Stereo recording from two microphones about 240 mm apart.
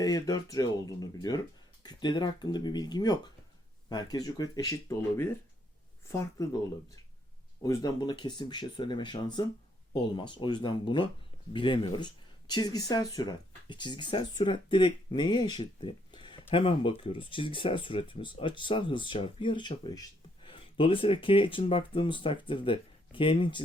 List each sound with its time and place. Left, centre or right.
0.0 s speech: centre
7.6 s speech: centre